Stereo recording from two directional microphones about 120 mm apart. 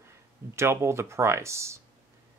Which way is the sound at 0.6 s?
20° right (ahead or behind).